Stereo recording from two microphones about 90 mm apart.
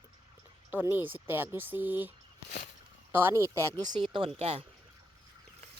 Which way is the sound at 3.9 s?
65° right (ahead or behind).